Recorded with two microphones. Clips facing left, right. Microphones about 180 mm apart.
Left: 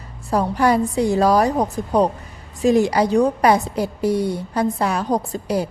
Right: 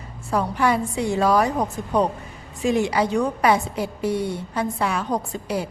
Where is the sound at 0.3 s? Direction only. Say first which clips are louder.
Left 3 dB; 40° left (ahead or behind).